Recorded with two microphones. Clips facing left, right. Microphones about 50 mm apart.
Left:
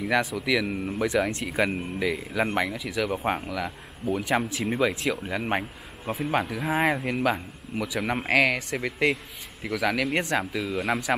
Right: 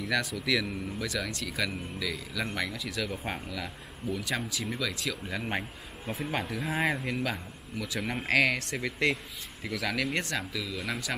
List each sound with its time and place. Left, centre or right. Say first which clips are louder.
0.0 s speech: left 5 dB; left
5.0 s speech: left 6 dB; centre
6.1 s a man's voice: left 6 dB; centre
10.5 s a man's voice: left 8 dB; left